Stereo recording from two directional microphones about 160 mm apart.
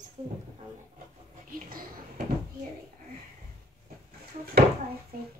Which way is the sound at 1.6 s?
65° right (ahead or behind).